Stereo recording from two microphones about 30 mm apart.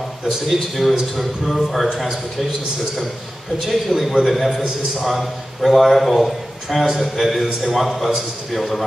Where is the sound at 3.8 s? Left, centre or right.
Centre.